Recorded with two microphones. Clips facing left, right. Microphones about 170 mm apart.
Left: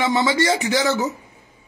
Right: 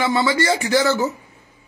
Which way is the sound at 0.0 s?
15° left (ahead or behind).